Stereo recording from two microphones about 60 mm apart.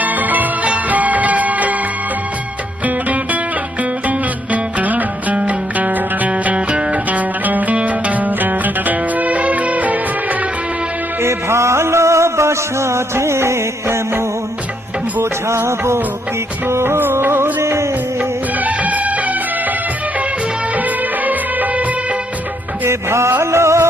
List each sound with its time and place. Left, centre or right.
0.0 s music: right
4.5 s music: right
11.2 s music: right
15.2 s music: right
18.6 s music: right
21.2 s music of bollywood: right
22.9 s music: right